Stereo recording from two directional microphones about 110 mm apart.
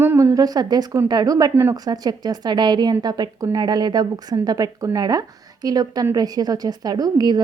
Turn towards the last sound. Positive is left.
turn(degrees=-35)  # may be behind; listen again after turning